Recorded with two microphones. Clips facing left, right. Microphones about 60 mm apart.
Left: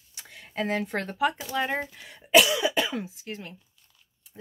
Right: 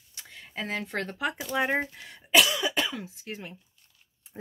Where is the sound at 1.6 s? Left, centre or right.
Centre.